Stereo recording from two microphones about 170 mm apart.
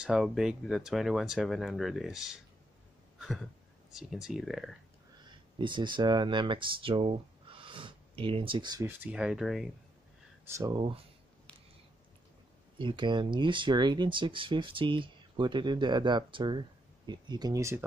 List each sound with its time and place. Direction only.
0.0 s speech: 5° right (ahead or behind)
3.2 s a sound: centre (ahead or behind)
3.9 s speech: centre (ahead or behind)
5.2 s speech: 25° right (ahead or behind)
8.8 s speech: 10° right (ahead or behind)
10.5 s speech: 25° right (ahead or behind)
12.7 s speech: 30° right (ahead or behind)